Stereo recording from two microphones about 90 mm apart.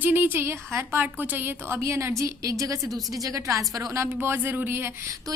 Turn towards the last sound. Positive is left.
turn(degrees=-35)  # may be behind; listen again after turning